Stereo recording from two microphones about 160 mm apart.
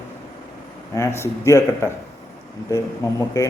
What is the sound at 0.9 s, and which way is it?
A man's voice, 15° left (ahead or behind).